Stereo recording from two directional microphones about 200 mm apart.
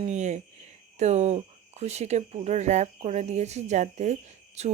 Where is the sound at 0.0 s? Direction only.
35° right (ahead or behind).